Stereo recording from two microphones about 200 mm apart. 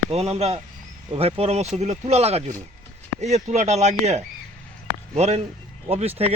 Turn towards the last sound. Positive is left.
turn(degrees=-30)  # may be behind; listen again after turning